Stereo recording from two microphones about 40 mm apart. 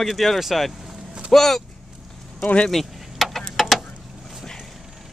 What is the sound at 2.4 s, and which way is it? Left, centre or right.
Speech, left.